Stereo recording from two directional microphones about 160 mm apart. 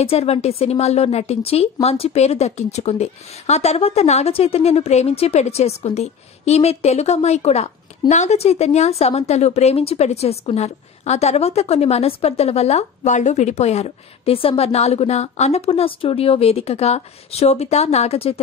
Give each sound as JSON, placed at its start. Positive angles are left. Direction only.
{"t": 0.0, "sound": "speech", "side_deg": 40}